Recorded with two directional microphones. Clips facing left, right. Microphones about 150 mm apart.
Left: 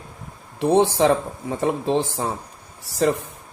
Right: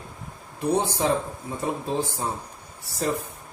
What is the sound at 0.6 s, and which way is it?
Speech, 90° left.